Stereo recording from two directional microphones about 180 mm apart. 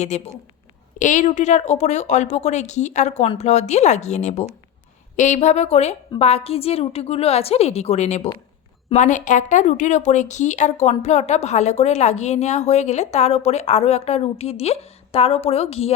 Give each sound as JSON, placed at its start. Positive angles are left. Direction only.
{"t": 0.1, "sound": "a woman's voice", "side_deg": 40}